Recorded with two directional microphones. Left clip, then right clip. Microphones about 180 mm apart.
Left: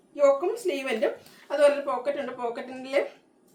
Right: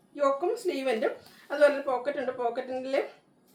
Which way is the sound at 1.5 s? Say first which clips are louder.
Left 2 dB; 15° left (ahead or behind).